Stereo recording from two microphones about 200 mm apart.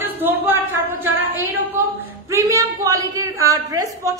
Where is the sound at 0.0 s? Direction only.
10° right (ahead or behind).